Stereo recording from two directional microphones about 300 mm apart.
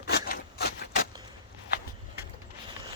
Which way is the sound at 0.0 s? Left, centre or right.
Left.